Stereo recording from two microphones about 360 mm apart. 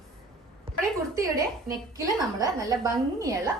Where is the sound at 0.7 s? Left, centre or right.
Centre.